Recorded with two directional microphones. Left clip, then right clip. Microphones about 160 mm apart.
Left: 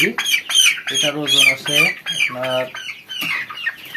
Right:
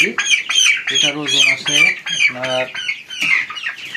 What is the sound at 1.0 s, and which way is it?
Speech, 10° left (ahead or behind).